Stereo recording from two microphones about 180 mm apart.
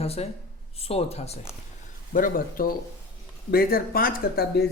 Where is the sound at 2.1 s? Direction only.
50° left (ahead or behind).